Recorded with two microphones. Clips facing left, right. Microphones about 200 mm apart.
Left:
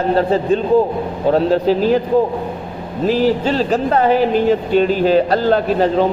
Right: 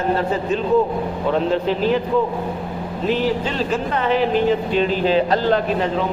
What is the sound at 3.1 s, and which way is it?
A man's voice, 35° left (ahead or behind).